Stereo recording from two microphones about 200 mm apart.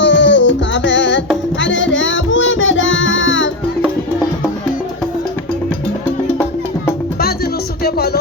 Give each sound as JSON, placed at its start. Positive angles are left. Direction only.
{"t": 0.0, "sound": "music", "side_deg": 65}
{"t": 6.1, "sound": "music", "side_deg": 10}
{"t": 7.2, "sound": "music", "side_deg": 50}